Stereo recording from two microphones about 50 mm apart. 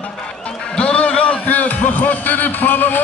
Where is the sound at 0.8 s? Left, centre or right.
Left.